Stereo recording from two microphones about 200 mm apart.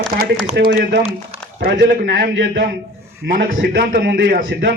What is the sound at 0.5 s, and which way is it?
A man's voice, 55° right (ahead or behind).